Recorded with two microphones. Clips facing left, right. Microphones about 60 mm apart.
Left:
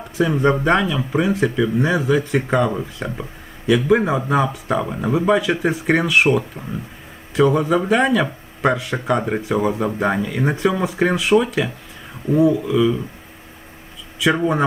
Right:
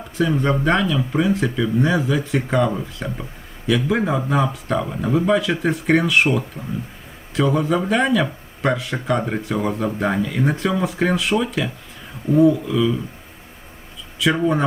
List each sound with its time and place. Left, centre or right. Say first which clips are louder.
0.2 s speech: left 2 dB; centre
14.2 s speech: left 1 dB; centre